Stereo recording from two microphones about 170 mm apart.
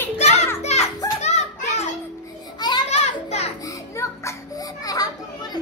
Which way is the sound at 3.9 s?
20° left (ahead or behind).